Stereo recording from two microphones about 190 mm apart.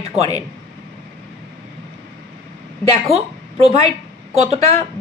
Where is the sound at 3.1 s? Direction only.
30° right (ahead or behind).